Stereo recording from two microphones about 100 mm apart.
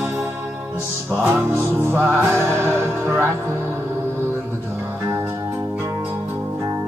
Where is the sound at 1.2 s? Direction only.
25° right (ahead or behind).